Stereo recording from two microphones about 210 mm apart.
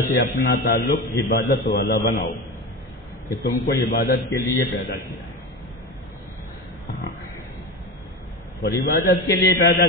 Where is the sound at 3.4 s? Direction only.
40° left (ahead or behind).